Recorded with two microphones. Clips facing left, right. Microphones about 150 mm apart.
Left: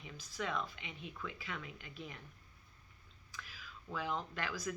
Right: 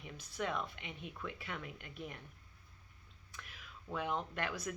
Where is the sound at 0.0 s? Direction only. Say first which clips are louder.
Right 2 dB; 60° right (ahead or behind).